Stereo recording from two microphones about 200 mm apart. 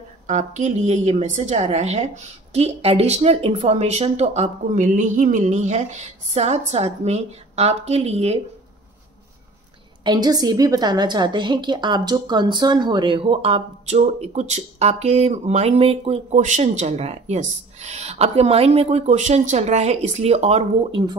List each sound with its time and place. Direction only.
0.3 s a woman's voice: 35° right (ahead or behind)
10.0 s a woman's voice: 20° right (ahead or behind)